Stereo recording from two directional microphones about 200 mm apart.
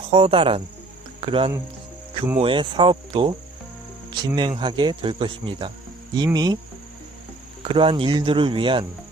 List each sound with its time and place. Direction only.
0.1 s speech: 25° right (ahead or behind)
4.4 s speech: 25° right (ahead or behind)
7.6 s speech: 25° right (ahead or behind)